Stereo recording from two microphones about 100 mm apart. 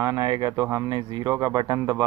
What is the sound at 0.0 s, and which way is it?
Speech, 35° right (ahead or behind).